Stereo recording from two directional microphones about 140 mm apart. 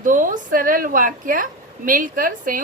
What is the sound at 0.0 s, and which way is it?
A woman's voice, 70° right (ahead or behind).